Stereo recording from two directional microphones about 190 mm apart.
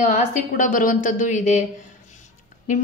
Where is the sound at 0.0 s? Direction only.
40° left (ahead or behind).